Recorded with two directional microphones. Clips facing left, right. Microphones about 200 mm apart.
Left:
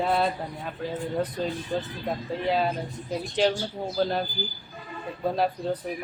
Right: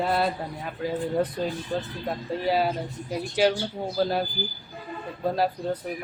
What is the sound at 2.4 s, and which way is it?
Speech, 5° right (ahead or behind).